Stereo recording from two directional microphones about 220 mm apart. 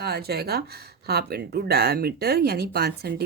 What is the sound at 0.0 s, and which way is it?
Speech, 45° right (ahead or behind).